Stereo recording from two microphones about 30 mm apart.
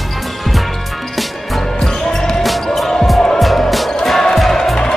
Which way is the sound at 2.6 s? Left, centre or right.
Centre.